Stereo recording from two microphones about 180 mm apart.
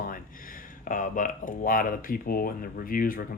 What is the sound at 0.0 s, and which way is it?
Speech, 50° left (ahead or behind).